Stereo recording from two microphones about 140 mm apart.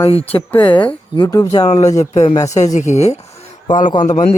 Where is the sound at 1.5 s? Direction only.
45° left (ahead or behind).